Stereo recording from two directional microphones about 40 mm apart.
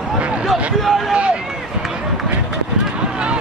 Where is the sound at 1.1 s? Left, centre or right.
Right.